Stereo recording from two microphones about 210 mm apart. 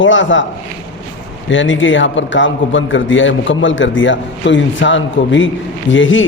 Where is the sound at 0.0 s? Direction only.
65° left (ahead or behind).